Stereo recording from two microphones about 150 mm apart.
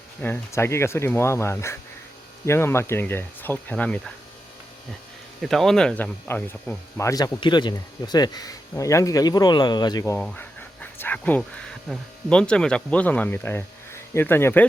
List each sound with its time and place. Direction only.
0.2 s speech: 15° left (ahead or behind)
5.4 s speech: centre (ahead or behind); by 10.2 s 25° left (ahead or behind)
10.2 s speech: 10° left (ahead or behind)